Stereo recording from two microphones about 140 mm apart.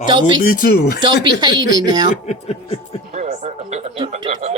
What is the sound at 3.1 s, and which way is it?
Speech, 55° right (ahead or behind).